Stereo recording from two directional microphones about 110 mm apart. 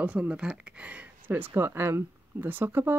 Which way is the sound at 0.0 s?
10° right (ahead or behind).